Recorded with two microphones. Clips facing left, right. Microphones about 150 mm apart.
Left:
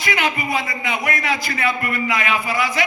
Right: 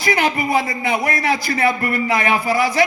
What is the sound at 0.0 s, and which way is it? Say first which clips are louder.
A man's voice: right 4 dB; 35° right (ahead or behind).